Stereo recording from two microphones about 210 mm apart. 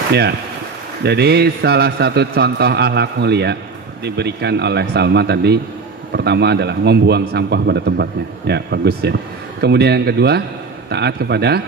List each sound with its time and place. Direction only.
0.1 s a man's voice: 50° right (ahead or behind)